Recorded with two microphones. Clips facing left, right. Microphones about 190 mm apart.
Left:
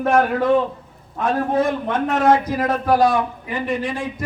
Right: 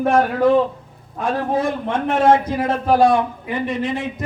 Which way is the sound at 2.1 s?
25° right (ahead or behind).